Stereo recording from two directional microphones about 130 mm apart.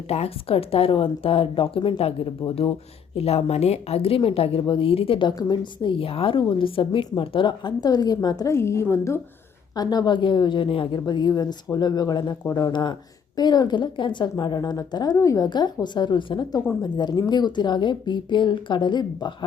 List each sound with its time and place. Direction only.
0.1 s a woman's voice: 50° left (ahead or behind); by 9.2 s 20° left (ahead or behind)
9.7 s speech: 30° left (ahead or behind)